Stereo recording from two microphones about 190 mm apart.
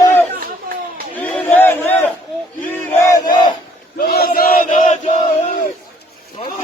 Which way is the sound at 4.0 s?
50° left (ahead or behind).